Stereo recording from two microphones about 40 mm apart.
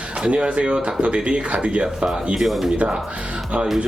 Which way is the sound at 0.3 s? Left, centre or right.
Right.